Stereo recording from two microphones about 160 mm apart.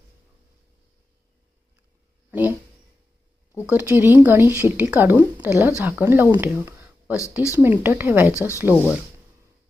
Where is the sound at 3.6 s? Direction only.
10° right (ahead or behind).